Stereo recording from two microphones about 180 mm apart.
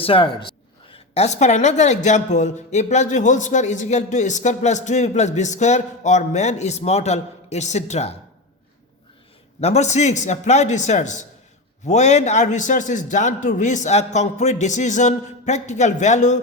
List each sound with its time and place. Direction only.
0.0 s a woman's voice: 30° left (ahead or behind)
9.6 s a woman's voice: 35° left (ahead or behind)